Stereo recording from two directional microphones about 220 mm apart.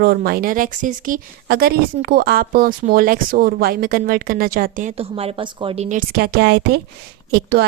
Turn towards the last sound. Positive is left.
turn(degrees=-45)  # may be behind; listen again after turning